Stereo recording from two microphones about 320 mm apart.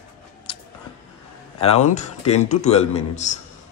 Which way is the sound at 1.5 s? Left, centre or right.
Centre.